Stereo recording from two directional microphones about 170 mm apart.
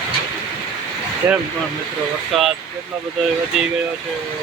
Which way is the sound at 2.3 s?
Centre (ahead or behind).